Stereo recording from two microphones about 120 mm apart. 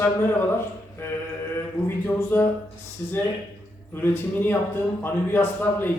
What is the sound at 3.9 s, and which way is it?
A man's voice, 15° left (ahead or behind).